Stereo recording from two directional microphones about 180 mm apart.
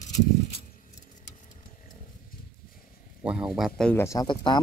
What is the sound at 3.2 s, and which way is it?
Speech, 5° right (ahead or behind).